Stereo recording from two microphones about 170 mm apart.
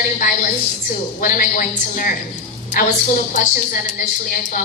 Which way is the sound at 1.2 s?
55° left (ahead or behind).